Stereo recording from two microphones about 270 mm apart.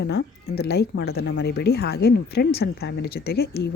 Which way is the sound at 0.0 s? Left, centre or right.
Left.